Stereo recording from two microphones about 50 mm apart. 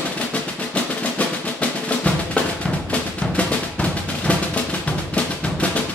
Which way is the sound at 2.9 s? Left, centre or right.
Left.